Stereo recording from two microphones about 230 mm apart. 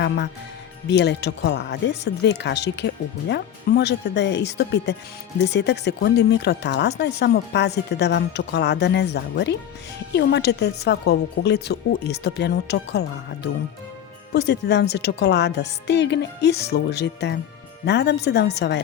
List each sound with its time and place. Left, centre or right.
0.9 s speech: left